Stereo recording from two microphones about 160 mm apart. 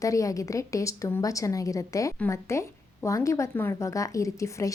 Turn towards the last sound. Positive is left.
turn(degrees=20)  # may be behind; listen again after turning